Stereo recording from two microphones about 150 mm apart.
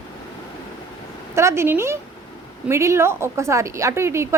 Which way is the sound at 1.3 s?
15° right (ahead or behind).